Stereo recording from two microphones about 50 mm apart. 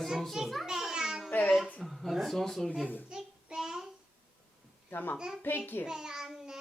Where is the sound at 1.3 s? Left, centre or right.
Left.